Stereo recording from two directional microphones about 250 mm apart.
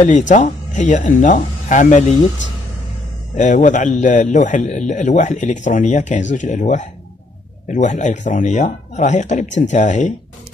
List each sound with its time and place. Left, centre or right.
0.0 s a man's voice: left
3.3 s a man's voice: left